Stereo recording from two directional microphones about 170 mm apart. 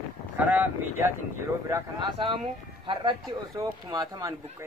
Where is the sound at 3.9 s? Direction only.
20° right (ahead or behind).